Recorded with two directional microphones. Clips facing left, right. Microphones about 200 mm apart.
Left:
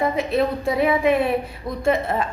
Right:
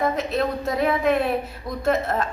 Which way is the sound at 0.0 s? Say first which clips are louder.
Left 2 dB; 10° left (ahead or behind).